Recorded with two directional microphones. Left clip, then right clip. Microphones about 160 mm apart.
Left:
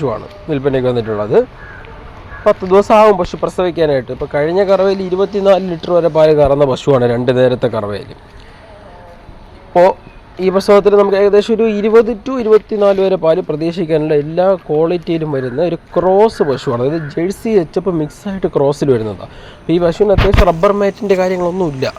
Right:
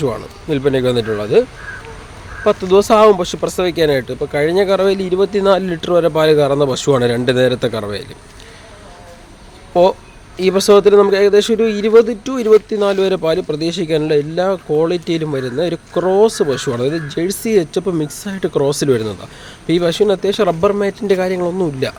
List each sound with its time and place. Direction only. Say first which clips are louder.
0.0 s speech: left 1 dB; 15° right (ahead or behind)
10.3 s speech: left 1 dB; 20° right (ahead or behind)